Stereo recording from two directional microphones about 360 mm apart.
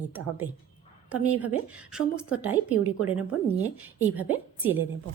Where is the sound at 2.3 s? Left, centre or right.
Right.